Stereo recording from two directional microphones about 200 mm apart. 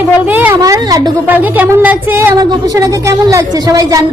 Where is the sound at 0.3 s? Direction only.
10° right (ahead or behind).